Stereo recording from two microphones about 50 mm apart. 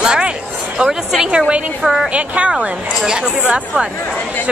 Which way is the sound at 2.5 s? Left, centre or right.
Centre.